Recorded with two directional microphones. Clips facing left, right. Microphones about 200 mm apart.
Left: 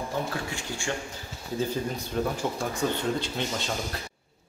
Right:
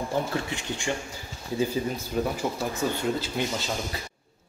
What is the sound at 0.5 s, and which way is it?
Speech, 20° right (ahead or behind).